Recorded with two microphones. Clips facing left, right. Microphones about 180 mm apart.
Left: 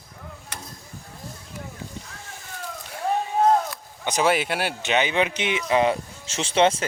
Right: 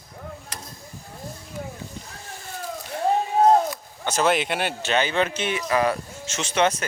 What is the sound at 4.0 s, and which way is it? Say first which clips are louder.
Speech: even; 15° left (ahead or behind).